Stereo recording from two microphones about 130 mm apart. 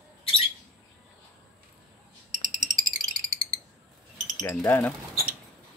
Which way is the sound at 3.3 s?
90° right.